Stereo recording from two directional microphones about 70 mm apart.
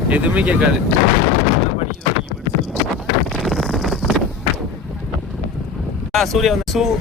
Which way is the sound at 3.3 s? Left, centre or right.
Centre.